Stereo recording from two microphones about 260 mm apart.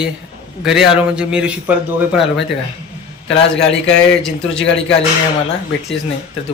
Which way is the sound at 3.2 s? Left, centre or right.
Left.